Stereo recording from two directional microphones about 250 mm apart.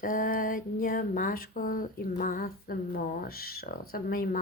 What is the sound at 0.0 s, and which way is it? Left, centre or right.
Speech, left.